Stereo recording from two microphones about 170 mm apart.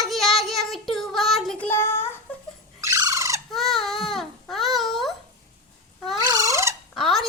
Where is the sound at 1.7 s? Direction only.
15° left (ahead or behind).